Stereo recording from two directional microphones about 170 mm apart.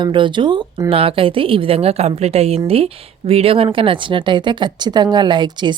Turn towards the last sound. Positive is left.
turn(degrees=-25)  # may be behind; listen again after turning